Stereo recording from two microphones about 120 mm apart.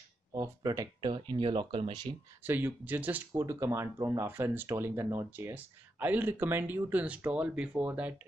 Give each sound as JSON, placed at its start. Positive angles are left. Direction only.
{"t": 0.3, "sound": "speech", "side_deg": -30}
{"t": 1.0, "sound": "speech", "side_deg": -40}
{"t": 2.4, "sound": "speech", "side_deg": -15}